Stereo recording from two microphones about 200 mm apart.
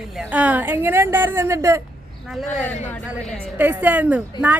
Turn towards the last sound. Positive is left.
turn(degrees=-5)  # may be behind; listen again after turning